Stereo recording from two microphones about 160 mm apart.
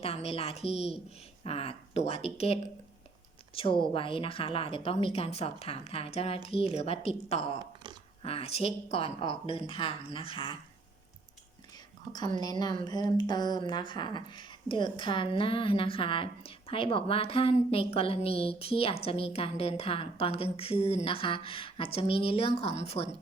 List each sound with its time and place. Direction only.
0.0 s a woman's voice: 40° left (ahead or behind)
12.1 s a woman's voice: 25° left (ahead or behind); by 23.0 s 40° left (ahead or behind)